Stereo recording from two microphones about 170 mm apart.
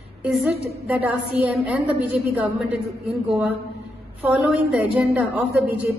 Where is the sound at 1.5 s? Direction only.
10° right (ahead or behind).